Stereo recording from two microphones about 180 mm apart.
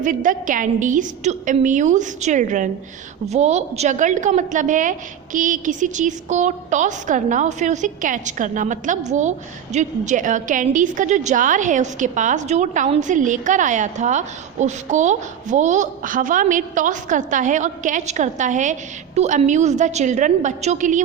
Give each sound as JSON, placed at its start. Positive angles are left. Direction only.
{"t": 0.0, "sound": "a woman's voice", "side_deg": -45}